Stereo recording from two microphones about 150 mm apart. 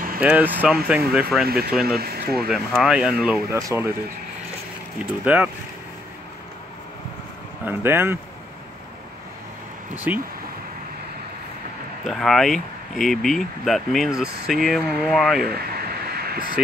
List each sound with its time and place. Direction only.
0.2 s speech: 10° right (ahead or behind)
2.0 s speech: 90° right
2.4 s speech: centre (ahead or behind)
3.5 s speech: 20° right (ahead or behind)
5.2 s speech: 10° right (ahead or behind)
7.6 s speech: 15° right (ahead or behind)
9.9 s speech: 10° right (ahead or behind)
12.0 s speech: centre (ahead or behind)
15.5 s a sound: 90° right